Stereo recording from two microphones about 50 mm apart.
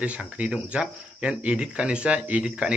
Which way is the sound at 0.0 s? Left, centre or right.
Right.